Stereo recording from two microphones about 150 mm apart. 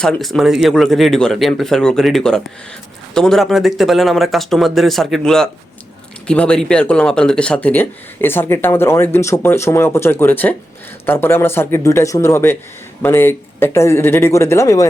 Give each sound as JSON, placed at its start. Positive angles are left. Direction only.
{"t": 0.0, "sound": "speech", "side_deg": 0}